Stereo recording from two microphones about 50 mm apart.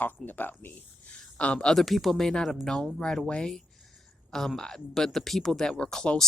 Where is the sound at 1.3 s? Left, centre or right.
Left.